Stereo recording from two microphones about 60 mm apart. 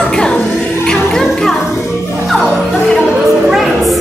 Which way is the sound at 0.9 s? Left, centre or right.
Centre.